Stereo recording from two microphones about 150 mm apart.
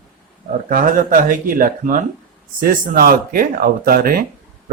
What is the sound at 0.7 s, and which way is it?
Speech, 65° right (ahead or behind).